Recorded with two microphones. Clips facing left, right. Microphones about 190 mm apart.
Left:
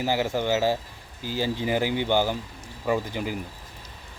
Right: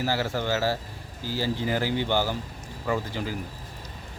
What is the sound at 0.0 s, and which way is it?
Speech, 15° left (ahead or behind).